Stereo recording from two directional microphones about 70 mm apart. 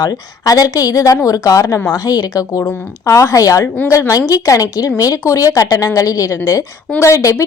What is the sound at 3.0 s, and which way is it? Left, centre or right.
A woman's voice, left.